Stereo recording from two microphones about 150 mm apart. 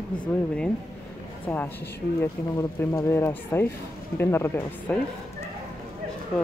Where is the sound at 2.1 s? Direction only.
20° left (ahead or behind).